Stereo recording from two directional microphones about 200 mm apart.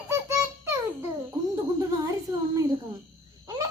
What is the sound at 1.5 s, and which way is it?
Speech, 15° right (ahead or behind).